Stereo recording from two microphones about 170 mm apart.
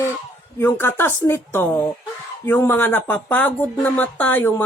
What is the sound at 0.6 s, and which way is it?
Speech, 15° left (ahead or behind).